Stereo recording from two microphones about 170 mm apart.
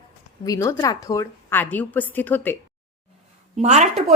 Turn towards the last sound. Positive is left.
turn(degrees=-40)  # may be behind; listen again after turning